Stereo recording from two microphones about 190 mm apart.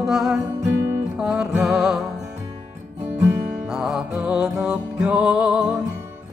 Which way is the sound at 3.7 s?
Centre (ahead or behind).